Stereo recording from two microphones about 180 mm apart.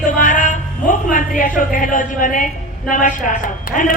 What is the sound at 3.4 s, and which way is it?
Speech, 50° left (ahead or behind).